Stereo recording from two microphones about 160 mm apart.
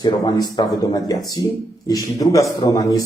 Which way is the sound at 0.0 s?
25° left (ahead or behind).